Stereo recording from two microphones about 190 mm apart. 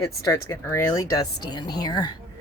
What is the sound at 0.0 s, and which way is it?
Speech, 15° left (ahead or behind).